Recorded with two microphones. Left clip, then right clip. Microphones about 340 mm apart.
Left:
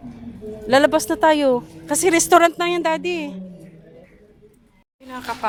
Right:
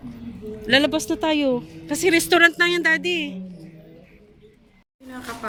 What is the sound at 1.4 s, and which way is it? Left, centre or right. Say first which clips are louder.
Speech: left 4 dB; left.